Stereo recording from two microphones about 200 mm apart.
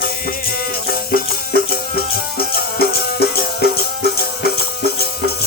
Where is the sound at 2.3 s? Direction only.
50° left (ahead or behind).